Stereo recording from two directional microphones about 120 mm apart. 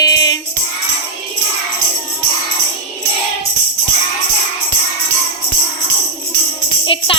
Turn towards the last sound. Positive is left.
turn(degrees=45)  # may be behind; listen again after turning